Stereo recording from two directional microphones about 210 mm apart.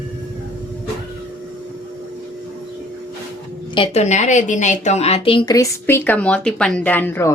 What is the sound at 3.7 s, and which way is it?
A woman's voice, 25° left (ahead or behind).